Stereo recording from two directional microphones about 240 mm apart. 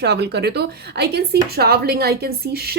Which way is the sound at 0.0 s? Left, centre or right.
Right.